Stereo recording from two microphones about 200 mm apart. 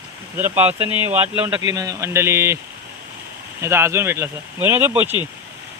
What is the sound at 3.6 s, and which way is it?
Speech, 10° right (ahead or behind).